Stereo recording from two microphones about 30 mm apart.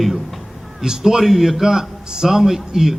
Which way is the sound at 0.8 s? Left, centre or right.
Right.